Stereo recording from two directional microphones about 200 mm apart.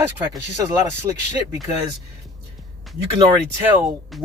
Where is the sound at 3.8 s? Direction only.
Centre (ahead or behind).